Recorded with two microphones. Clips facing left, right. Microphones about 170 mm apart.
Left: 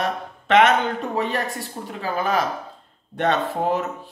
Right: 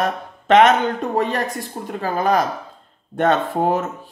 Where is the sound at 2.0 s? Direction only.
45° right (ahead or behind).